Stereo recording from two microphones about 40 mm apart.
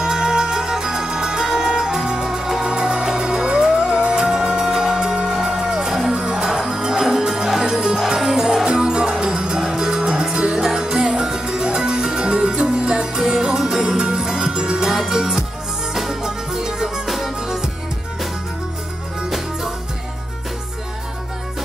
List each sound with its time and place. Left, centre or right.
0.0 s music: centre
14.9 s music: centre
19.2 s music: centre